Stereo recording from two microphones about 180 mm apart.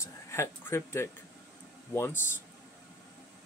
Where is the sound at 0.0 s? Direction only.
15° left (ahead or behind).